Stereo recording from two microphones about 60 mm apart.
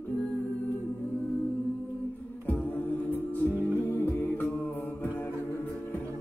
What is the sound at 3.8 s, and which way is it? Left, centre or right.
Music, left.